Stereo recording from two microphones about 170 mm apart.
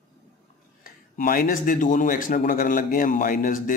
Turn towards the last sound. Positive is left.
turn(degrees=55)  # may be behind; listen again after turning